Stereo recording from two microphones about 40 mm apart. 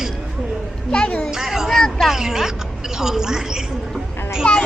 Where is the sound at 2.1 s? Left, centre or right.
Centre.